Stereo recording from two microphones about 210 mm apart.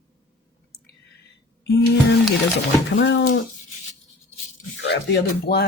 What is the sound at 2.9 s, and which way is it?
Speech, 60° left (ahead or behind).